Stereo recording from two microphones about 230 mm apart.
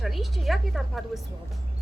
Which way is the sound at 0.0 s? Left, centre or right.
Centre.